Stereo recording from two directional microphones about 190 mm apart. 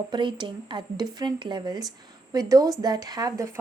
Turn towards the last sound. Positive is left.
turn(degrees=-20)  # may be behind; listen again after turning